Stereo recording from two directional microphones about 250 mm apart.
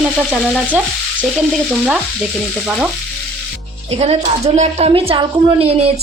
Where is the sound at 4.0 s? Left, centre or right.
Right.